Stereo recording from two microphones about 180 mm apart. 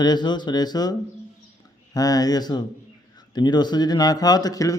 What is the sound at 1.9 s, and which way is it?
A man's voice, 20° left (ahead or behind).